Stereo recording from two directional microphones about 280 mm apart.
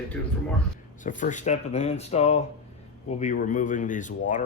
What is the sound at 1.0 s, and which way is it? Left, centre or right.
Speech, left.